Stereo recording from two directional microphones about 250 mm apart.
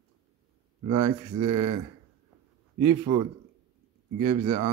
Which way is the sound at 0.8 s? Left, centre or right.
Centre.